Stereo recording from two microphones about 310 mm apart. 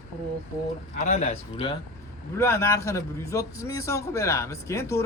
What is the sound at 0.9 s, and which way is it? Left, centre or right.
A man's voice, left.